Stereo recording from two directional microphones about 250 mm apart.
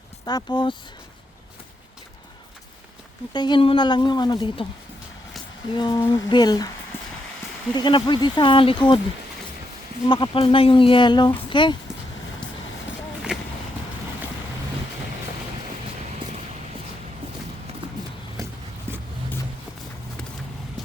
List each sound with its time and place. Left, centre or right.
0.3 s a woman's voice: centre
3.3 s a woman's voice: centre
5.7 s a woman's voice: centre
7.7 s speech: centre
10.1 s speech: centre
13.3 s vehicle: centre